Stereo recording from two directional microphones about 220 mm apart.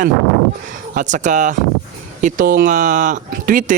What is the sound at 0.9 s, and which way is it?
Speech, 35° right (ahead or behind).